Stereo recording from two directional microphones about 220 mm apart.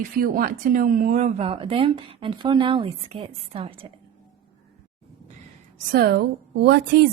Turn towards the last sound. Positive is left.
turn(degrees=-50)  # may be behind; listen again after turning